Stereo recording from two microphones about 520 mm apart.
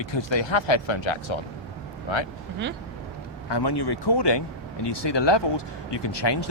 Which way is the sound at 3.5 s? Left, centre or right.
Left.